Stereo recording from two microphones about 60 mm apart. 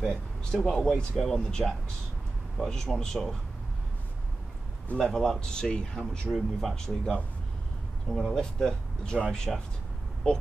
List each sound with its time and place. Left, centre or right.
0.1 s speech: centre
0.7 s speech: centre
4.9 s speech: centre